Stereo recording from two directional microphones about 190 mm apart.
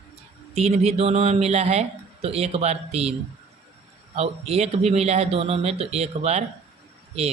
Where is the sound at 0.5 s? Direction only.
35° right (ahead or behind).